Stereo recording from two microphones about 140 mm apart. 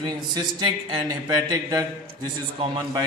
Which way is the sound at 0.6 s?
30° right (ahead or behind).